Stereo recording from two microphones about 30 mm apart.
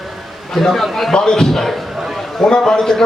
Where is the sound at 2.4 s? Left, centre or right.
Left.